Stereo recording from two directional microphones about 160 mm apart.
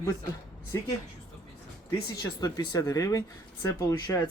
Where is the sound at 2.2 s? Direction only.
25° left (ahead or behind).